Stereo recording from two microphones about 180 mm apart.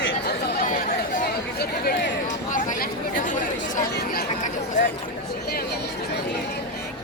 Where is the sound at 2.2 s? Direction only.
45° left (ahead or behind).